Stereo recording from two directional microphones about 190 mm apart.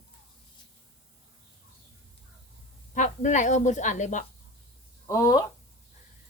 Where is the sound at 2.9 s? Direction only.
40° left (ahead or behind).